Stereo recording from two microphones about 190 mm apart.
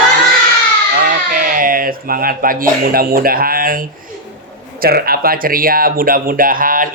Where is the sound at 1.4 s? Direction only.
45° right (ahead or behind).